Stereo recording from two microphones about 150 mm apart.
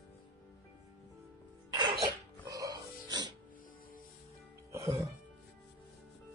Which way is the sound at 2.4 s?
25° right (ahead or behind).